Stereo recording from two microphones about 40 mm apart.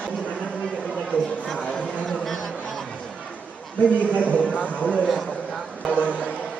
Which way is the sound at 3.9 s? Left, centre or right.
Left.